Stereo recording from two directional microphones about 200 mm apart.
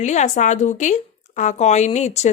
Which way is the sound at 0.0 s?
35° left (ahead or behind).